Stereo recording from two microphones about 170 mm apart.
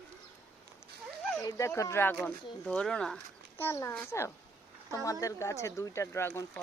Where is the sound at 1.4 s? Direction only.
20° left (ahead or behind); by 3.2 s 5° left (ahead or behind).